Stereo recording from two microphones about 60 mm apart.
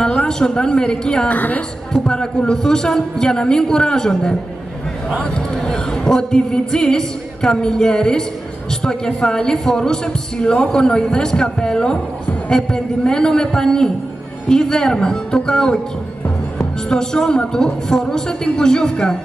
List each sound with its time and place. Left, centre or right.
0.0 s a woman's voice: centre
1.3 s a woman's voice: left
2.0 s a woman's voice: centre